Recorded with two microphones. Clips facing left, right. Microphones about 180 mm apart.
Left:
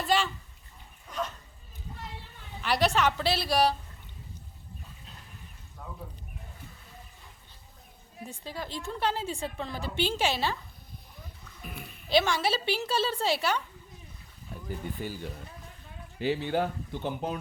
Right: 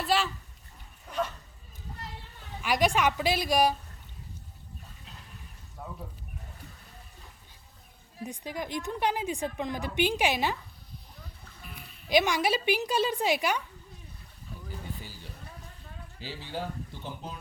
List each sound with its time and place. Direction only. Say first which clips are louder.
0.0 s a sound: left 1 dB; centre (ahead or behind)
2.6 s a woman's voice: even; 10° right (ahead or behind)
5.8 s a sound: right 2 dB; 5° right (ahead or behind)
8.2 s a woman's voice: right 3 dB; 15° right (ahead or behind)
12.0 s a woman's voice: right 1 dB; 15° right (ahead or behind)
15.0 s speech: left 11 dB; 55° left (ahead or behind)
16.2 s speech: left 9 dB; 60° left (ahead or behind)